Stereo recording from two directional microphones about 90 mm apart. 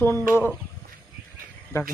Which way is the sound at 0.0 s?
25° left (ahead or behind).